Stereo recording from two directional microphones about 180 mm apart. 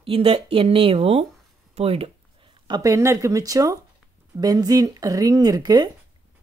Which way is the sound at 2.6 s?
20° right (ahead or behind).